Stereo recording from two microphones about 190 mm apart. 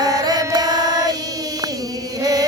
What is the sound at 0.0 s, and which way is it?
Chant, 20° right (ahead or behind).